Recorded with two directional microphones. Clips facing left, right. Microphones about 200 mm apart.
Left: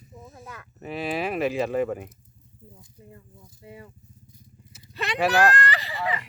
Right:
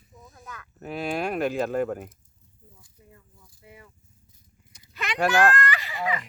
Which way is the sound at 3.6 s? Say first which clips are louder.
Left 6 dB; 30° left (ahead or behind).